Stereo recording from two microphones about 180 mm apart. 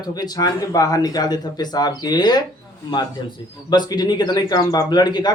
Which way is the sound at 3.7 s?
25° left (ahead or behind).